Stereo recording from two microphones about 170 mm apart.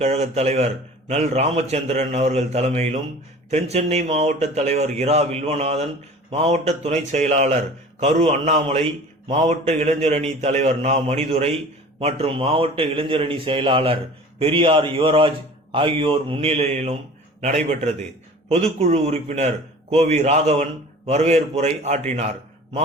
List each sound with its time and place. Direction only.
0.0 s a man's voice: 40° right (ahead or behind)
18.4 s a man's voice: 35° right (ahead or behind)